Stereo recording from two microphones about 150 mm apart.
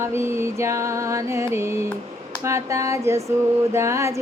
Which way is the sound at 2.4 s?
20° right (ahead or behind).